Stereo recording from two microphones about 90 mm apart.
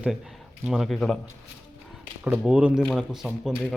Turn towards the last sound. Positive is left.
turn(degrees=-5)  # may be behind; listen again after turning